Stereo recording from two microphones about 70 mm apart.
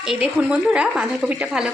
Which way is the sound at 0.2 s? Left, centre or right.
Centre.